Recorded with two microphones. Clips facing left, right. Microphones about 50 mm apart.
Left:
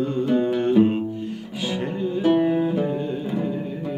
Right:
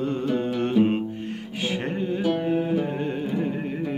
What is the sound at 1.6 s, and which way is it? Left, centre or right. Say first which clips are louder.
Music: left 2 dB; right.